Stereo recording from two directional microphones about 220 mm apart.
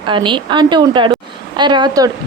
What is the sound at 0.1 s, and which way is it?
A woman's voice, 20° right (ahead or behind).